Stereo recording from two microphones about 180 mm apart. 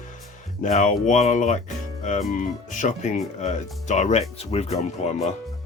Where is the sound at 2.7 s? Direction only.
45° left (ahead or behind).